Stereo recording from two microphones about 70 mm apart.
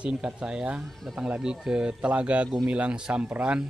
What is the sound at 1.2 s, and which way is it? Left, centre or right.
Speech, centre.